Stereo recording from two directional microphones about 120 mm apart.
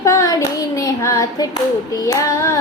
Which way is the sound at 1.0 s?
25° left (ahead or behind).